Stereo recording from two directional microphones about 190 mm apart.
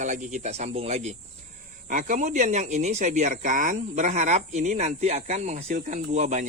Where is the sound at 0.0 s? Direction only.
40° right (ahead or behind).